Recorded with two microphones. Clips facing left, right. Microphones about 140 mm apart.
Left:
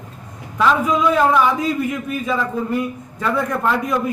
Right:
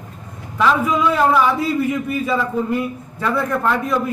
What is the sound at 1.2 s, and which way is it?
A man's voice, 5° right (ahead or behind).